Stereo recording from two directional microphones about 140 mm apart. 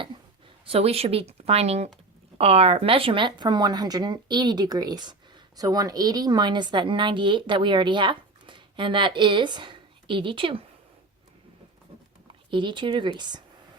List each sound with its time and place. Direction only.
0.6 s a woman's voice: 45° right (ahead or behind)
12.5 s a woman's voice: 35° right (ahead or behind)